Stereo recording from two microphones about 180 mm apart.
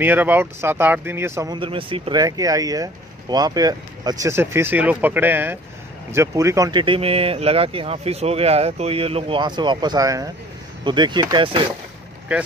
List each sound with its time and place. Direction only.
0.0 s speech: 10° right (ahead or behind)
1.6 s speech: 30° right (ahead or behind)